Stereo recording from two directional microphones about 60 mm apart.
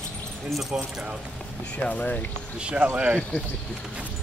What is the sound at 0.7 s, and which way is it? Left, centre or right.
Speech, centre.